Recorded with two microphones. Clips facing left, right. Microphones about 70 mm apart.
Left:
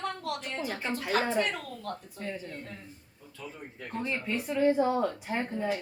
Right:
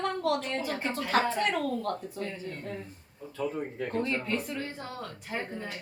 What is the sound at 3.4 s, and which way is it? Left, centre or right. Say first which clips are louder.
Speech: right 11 dB; right.